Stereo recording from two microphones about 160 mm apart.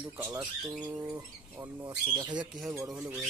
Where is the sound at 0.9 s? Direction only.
20° right (ahead or behind).